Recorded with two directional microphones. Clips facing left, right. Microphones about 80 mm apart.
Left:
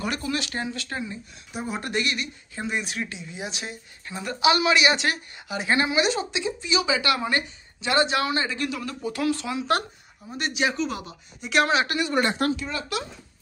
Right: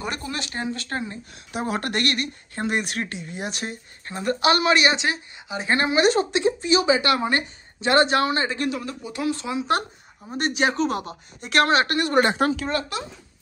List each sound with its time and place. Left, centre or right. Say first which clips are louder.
0.0 s speech: left 2 dB; right
1.5 s speech: right 3 dB; right
4.9 s speech: right 1 dB; right
5.8 s speech: right 6 dB; right
9.0 s speech: left 2 dB; right
10.3 s speech: right 3 dB; right